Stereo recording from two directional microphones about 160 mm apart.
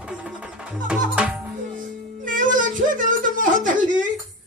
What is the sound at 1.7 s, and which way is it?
Music, 55° right (ahead or behind).